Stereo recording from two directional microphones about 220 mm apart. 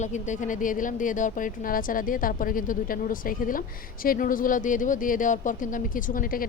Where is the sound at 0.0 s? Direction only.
35° left (ahead or behind).